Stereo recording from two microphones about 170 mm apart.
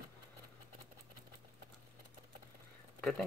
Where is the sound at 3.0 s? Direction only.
5° left (ahead or behind).